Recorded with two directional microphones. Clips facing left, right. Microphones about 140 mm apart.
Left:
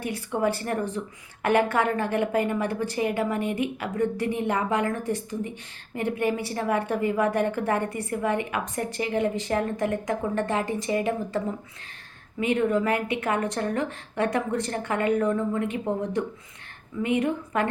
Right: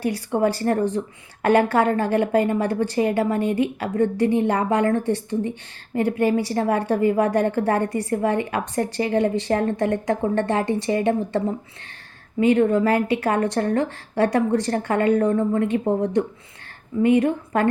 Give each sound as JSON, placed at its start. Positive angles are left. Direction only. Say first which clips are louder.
{"t": 0.3, "sound": "a woman's voice", "louder": "right 5 dB", "side_deg": -30}